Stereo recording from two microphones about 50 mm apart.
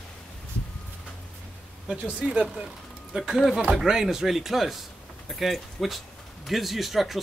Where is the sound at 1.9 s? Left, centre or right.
Right.